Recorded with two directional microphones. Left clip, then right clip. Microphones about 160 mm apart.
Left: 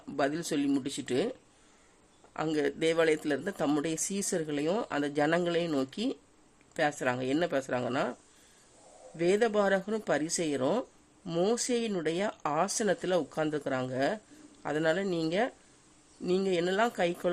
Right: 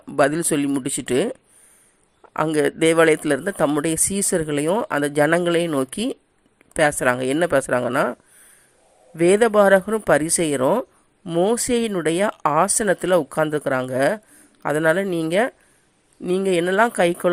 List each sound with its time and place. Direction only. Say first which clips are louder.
0.2 s speech: right 12 dB; 30° right (ahead or behind)